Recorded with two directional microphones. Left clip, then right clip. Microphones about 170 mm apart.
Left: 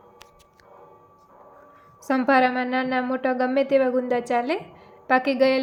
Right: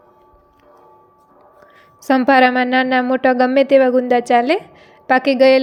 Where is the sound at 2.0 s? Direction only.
35° right (ahead or behind).